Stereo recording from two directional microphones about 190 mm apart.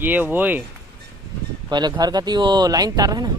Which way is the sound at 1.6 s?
20° right (ahead or behind).